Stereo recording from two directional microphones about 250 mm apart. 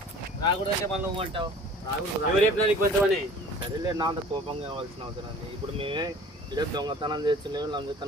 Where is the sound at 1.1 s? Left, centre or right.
Right.